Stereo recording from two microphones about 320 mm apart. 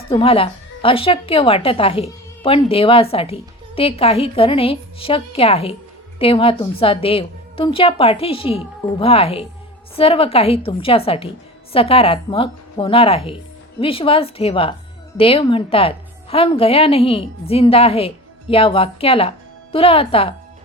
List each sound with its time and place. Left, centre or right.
0.1 s a woman's voice: centre